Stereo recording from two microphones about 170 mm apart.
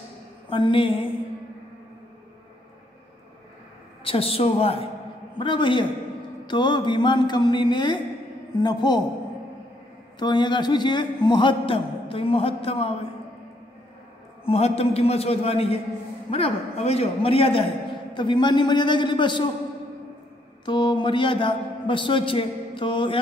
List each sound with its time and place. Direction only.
0.5 s a man's voice: 30° left (ahead or behind)
4.0 s a man's voice: 35° left (ahead or behind)
10.1 s a man's voice: 25° left (ahead or behind)
14.4 s a man's voice: 35° left (ahead or behind)
20.6 s a man's voice: 30° left (ahead or behind)